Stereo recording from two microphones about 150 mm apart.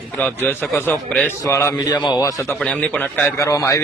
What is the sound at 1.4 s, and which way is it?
Speech, 20° left (ahead or behind).